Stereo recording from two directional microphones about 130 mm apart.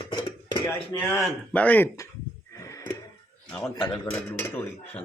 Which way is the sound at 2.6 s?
25° left (ahead or behind).